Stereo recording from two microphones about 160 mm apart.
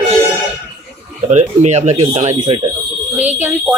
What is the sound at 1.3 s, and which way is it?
Speech, 45° right (ahead or behind).